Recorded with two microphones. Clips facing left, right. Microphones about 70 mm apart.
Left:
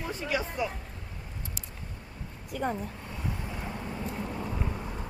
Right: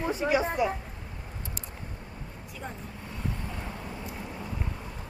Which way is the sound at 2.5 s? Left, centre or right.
Left.